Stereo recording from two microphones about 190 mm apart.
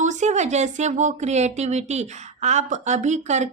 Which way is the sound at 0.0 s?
40° right (ahead or behind).